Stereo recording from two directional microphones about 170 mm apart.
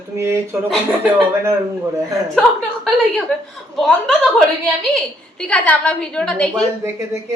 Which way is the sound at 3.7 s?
Centre (ahead or behind).